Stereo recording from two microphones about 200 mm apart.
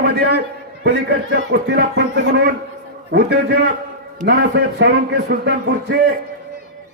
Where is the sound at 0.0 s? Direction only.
55° right (ahead or behind).